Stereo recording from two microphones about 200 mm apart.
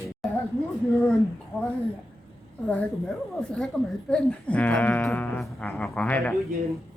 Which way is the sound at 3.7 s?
5° left (ahead or behind).